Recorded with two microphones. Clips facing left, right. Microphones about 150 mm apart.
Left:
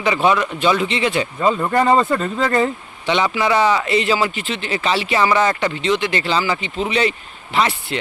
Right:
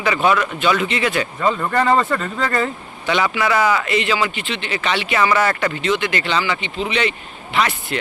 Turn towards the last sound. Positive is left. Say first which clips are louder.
# left 1 dB
turn(degrees=30)  # may be behind; listen again after turning